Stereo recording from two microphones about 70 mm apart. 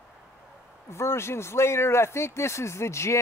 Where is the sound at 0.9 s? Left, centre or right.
Left.